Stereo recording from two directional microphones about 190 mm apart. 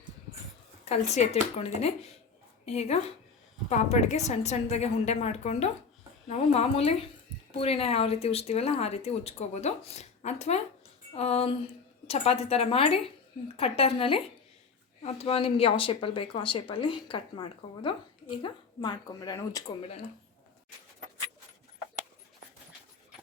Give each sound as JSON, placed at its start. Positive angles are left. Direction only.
{"t": 0.9, "sound": "a woman's voice", "side_deg": 35}